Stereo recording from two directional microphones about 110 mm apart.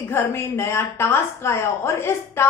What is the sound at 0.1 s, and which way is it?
A woman's voice, 20° left (ahead or behind).